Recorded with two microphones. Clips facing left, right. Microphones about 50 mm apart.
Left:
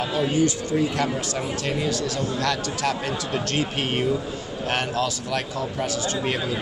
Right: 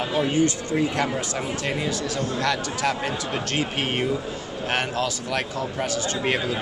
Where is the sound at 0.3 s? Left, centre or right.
Right.